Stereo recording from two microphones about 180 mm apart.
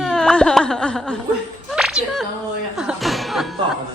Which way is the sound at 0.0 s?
5° left (ahead or behind).